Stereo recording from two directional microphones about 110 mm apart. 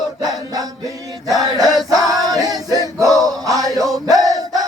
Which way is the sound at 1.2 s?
35° right (ahead or behind).